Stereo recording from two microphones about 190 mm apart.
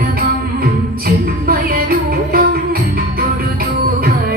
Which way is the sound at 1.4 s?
50° right (ahead or behind).